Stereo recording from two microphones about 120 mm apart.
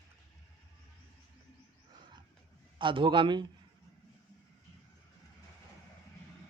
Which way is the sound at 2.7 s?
45° right (ahead or behind).